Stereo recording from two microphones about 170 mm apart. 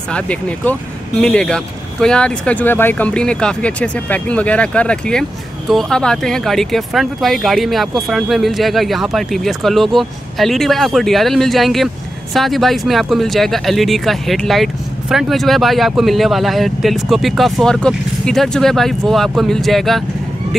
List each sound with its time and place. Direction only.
0.1 s speech: 5° left (ahead or behind)